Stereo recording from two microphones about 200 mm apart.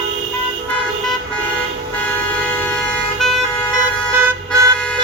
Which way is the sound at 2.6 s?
10° left (ahead or behind).